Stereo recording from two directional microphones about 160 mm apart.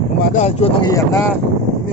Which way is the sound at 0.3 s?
40° left (ahead or behind).